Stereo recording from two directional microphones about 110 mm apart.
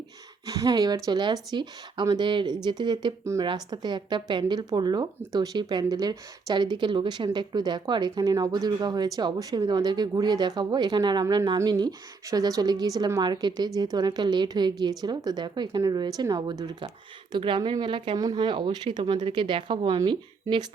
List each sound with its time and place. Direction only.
0.4 s speech: 35° right (ahead or behind); by 18.2 s 50° right (ahead or behind)
18.2 s speech: 35° right (ahead or behind)